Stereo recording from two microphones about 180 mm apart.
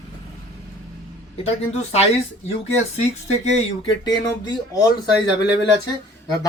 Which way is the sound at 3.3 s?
40° left (ahead or behind).